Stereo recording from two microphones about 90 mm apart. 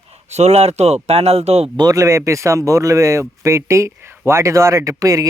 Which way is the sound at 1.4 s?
90° right.